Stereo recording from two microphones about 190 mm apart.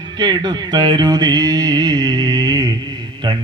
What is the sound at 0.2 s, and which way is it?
Mantra, 20° right (ahead or behind).